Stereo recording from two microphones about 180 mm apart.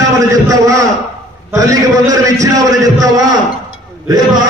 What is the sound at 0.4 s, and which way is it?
A man's voice, 20° right (ahead or behind).